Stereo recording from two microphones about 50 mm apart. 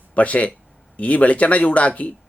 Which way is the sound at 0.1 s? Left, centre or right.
Left.